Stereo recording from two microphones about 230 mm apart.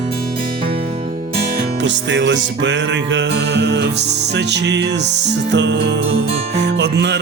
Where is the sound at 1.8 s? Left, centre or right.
Right.